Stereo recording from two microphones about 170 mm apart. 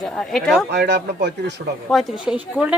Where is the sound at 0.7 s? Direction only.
75° right (ahead or behind).